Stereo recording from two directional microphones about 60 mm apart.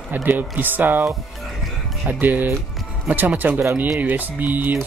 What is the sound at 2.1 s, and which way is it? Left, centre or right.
Speech, right.